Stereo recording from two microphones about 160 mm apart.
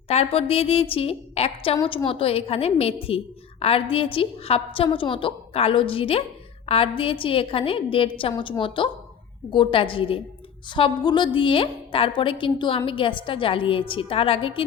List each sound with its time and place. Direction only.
0.1 s a woman's voice: 40° left (ahead or behind)